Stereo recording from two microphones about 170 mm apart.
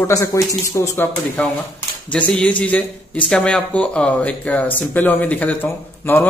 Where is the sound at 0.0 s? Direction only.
20° left (ahead or behind).